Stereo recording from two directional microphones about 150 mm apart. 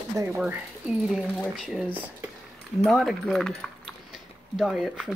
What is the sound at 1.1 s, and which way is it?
Speech, centre (ahead or behind).